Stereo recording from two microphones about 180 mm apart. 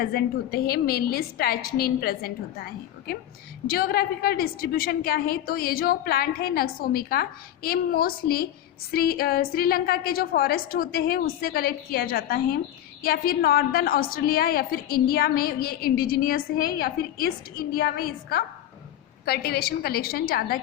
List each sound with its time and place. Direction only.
0.0 s a woman's voice: 55° left (ahead or behind)
3.7 s a woman's voice: 55° left (ahead or behind)